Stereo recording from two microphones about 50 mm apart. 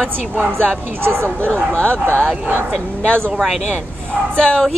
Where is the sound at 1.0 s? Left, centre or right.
Right.